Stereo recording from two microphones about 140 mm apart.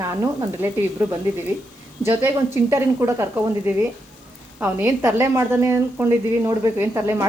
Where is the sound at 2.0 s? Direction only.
20° right (ahead or behind).